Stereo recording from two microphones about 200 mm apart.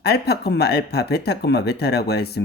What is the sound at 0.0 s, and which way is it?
Speech, 55° left (ahead or behind).